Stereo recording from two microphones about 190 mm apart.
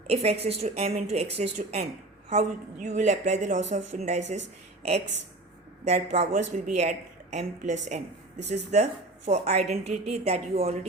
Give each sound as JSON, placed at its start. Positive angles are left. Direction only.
{"t": 0.1, "sound": "a woman's voice", "side_deg": -35}